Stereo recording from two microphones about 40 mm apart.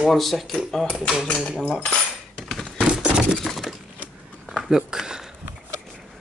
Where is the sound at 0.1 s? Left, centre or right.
Centre.